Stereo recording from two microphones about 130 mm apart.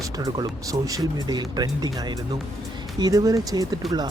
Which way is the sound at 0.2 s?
30° right (ahead or behind).